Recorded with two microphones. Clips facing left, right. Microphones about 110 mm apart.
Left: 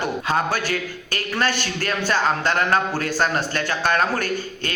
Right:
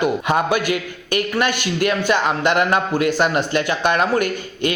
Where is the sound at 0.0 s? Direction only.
15° right (ahead or behind).